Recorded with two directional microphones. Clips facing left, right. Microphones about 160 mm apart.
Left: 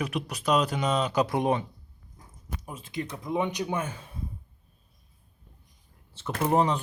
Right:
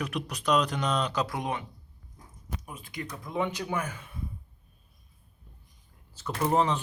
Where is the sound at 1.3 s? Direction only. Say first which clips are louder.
Left 7 dB; 25° left (ahead or behind).